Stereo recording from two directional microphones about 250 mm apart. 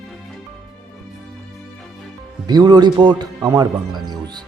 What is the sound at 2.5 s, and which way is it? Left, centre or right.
Speech, centre.